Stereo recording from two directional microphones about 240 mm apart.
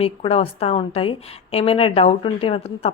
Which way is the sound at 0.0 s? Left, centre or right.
Left.